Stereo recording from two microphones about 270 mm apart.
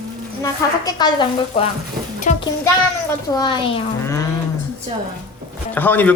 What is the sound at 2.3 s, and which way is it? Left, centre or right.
Music, left.